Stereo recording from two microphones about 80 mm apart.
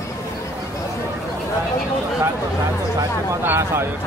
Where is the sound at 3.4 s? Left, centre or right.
Right.